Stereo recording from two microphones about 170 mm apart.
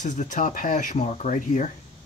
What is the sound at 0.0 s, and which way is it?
Speech, 50° left (ahead or behind).